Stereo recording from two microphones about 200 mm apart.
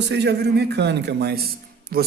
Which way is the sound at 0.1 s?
55° right (ahead or behind).